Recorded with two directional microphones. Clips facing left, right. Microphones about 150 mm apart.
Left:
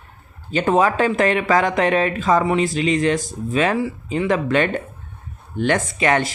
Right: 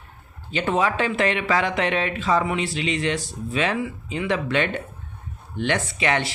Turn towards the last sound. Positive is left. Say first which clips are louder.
# left 5 dB
turn(degrees=45)  # may be behind; listen again after turning